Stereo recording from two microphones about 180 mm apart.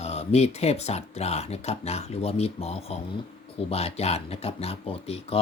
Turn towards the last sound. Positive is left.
turn(degrees=35)  # may be behind; listen again after turning